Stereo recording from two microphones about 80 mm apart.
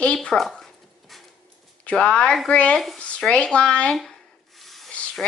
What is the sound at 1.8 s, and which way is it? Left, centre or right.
Speech, centre.